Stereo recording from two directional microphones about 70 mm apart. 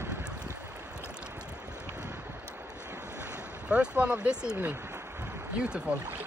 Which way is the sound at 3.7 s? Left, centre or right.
Centre.